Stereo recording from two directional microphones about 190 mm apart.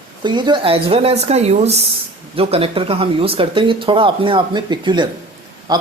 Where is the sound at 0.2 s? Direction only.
25° right (ahead or behind).